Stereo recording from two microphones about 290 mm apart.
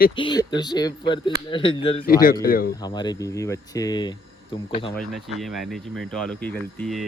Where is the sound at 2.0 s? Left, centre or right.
Left.